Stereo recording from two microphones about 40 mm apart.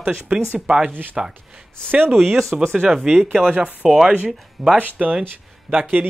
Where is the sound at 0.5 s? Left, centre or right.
Right.